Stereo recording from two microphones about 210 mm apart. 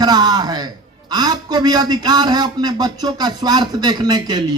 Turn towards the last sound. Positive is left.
turn(degrees=-20)  # may be behind; listen again after turning